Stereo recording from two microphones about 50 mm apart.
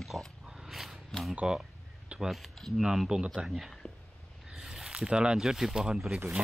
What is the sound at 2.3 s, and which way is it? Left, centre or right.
Speech, centre.